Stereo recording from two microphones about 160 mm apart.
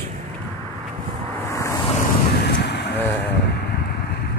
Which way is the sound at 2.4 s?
90° left.